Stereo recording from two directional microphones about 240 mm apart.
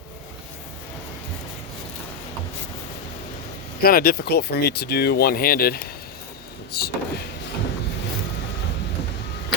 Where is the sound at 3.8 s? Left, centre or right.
Left.